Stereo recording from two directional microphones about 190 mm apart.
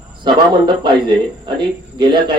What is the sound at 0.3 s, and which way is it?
A man's voice, 20° right (ahead or behind).